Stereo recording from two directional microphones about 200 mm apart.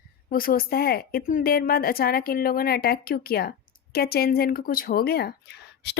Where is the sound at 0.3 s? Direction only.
45° left (ahead or behind).